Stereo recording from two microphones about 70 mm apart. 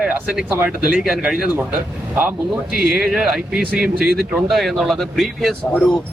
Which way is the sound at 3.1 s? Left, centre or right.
Centre.